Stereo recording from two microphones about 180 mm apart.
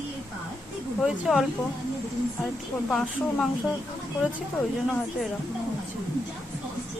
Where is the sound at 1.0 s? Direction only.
Centre (ahead or behind).